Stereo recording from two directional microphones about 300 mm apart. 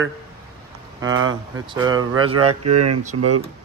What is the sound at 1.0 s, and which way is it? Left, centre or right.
Speech, right.